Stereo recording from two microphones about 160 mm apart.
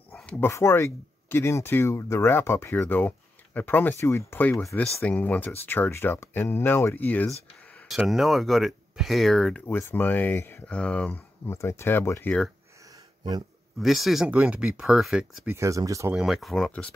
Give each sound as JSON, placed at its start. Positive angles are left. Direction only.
{"t": 0.1, "sound": "bow-wow", "side_deg": 10}
{"t": 0.5, "sound": "speech", "side_deg": 15}
{"t": 7.7, "sound": "speech", "side_deg": 0}
{"t": 9.7, "sound": "speech", "side_deg": 15}
{"t": 13.7, "sound": "speech", "side_deg": 0}
{"t": 15.4, "sound": "speech", "side_deg": -15}
{"t": 16.1, "sound": "speech", "side_deg": -5}